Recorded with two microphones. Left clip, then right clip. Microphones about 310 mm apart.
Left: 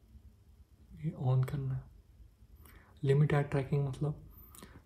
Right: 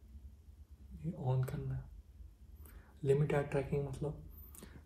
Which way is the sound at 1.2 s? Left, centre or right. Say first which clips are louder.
Left 3 dB; left.